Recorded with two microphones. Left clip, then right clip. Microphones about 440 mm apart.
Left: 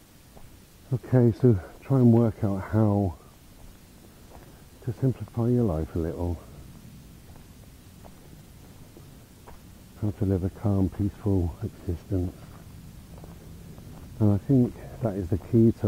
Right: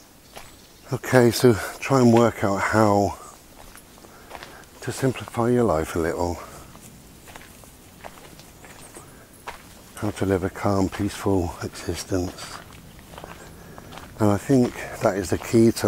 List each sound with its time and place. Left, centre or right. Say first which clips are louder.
0.8 s speech: right 7 dB; centre
4.8 s speech: right 6 dB; centre
9.5 s speech: right 14 dB; centre
13.9 s speech: right 6 dB; centre